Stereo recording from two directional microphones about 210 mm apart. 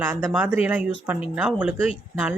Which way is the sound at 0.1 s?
5° right (ahead or behind).